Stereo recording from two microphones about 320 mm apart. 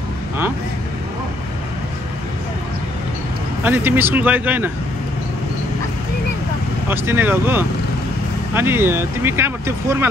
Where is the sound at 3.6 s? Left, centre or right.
Centre.